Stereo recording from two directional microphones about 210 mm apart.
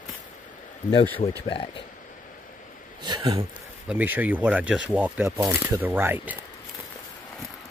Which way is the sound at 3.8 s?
10° right (ahead or behind).